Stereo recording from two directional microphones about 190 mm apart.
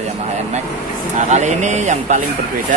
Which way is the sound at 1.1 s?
40° right (ahead or behind).